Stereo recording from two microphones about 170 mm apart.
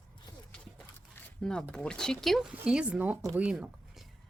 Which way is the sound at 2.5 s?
5° right (ahead or behind).